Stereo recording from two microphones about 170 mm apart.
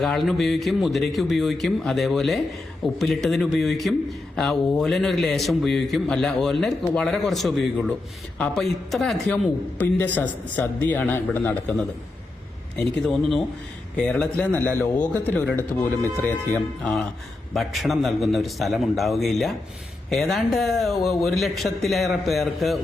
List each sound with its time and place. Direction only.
0.0 s a man's voice: centre (ahead or behind)